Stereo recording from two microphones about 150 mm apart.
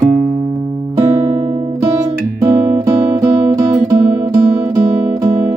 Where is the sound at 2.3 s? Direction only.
20° right (ahead or behind).